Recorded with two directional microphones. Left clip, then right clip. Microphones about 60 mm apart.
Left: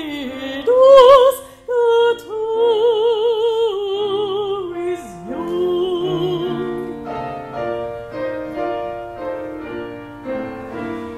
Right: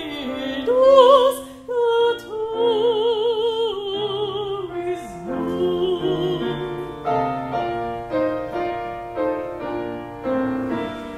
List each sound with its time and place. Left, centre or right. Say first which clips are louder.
0.7 s music: left 5 dB; left
5.7 s music: left 2 dB; left